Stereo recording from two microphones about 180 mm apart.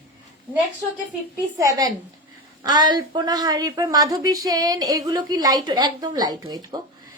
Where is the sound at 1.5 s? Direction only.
15° right (ahead or behind).